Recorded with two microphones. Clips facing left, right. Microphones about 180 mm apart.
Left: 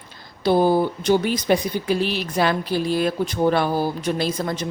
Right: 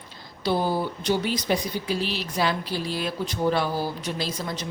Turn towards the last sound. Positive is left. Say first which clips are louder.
# left 6 dB
turn(degrees=55)  # may be behind; listen again after turning